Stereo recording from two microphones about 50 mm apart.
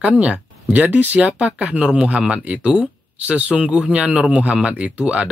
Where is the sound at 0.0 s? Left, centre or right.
Right.